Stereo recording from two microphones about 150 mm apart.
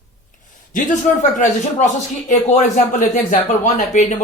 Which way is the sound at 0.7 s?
55° left (ahead or behind).